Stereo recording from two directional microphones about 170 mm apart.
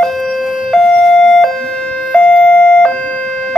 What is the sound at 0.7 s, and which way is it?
Siren, centre (ahead or behind).